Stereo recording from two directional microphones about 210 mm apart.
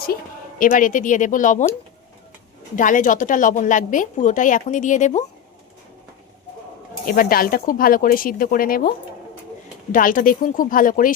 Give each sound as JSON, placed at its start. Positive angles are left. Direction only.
{"t": 0.6, "sound": "a woman's voice", "side_deg": 40}
{"t": 2.7, "sound": "a woman's voice", "side_deg": 40}
{"t": 7.0, "sound": "speech", "side_deg": 45}
{"t": 9.9, "sound": "a woman's voice", "side_deg": 40}